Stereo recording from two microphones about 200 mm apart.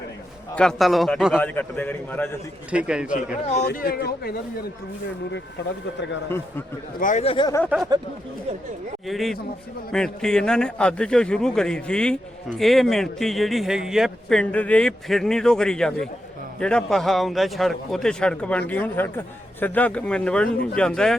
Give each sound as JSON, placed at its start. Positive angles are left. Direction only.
{"t": 0.5, "sound": "a man's voice", "side_deg": 5}
{"t": 2.7, "sound": "a man's voice", "side_deg": -5}
{"t": 3.4, "sound": "speech", "side_deg": 35}
{"t": 7.0, "sound": "speech", "side_deg": 35}
{"t": 9.0, "sound": "a man's voice", "side_deg": 0}